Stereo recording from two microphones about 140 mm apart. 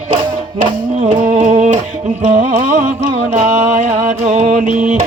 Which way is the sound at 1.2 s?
65° right (ahead or behind).